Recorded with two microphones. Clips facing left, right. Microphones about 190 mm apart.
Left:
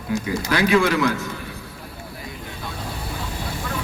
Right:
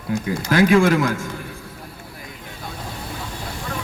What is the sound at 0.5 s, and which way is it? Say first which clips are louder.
Speech: right 4 dB; 50° right (ahead or behind).